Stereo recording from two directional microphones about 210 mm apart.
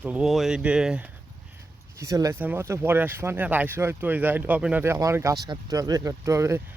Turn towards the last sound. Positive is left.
turn(degrees=-15)  # may be behind; listen again after turning